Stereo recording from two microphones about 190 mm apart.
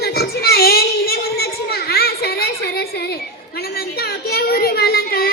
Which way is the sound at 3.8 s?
55° left (ahead or behind).